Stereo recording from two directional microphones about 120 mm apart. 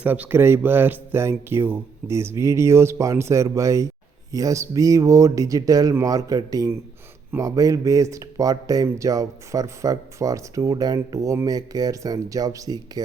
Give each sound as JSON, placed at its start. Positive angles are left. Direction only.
{"t": 0.0, "sound": "speech", "side_deg": -15}